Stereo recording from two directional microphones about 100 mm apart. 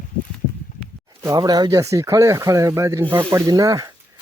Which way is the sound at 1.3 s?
40° right (ahead or behind).